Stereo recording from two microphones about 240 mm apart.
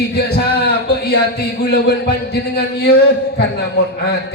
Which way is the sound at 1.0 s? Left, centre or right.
Left.